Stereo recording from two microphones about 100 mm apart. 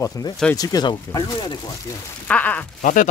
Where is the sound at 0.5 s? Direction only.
40° left (ahead or behind).